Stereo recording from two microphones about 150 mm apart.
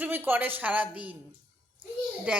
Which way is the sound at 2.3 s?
10° right (ahead or behind).